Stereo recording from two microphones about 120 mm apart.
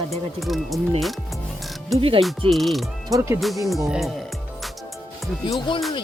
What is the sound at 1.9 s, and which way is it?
Music, centre (ahead or behind).